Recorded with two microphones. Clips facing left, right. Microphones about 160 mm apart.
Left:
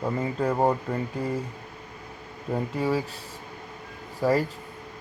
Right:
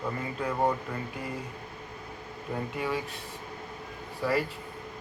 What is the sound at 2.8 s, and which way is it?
Speech, 35° left (ahead or behind).